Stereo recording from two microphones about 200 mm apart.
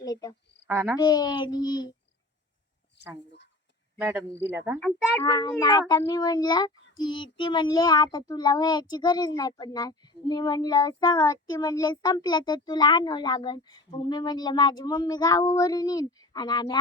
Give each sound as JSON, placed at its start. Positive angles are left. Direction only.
{"t": 0.0, "sound": "cricket", "side_deg": 20}
{"t": 0.7, "sound": "speech", "side_deg": -10}
{"t": 1.0, "sound": "speech", "side_deg": 20}
{"t": 3.9, "sound": "speech", "side_deg": -10}
{"t": 5.2, "sound": "speech", "side_deg": 20}